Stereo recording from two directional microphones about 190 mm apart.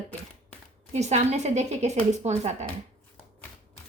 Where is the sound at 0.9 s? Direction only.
35° right (ahead or behind).